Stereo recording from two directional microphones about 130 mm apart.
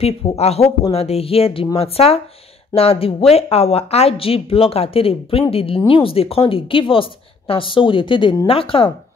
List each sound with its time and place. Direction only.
0.0 s speech: 55° left (ahead or behind)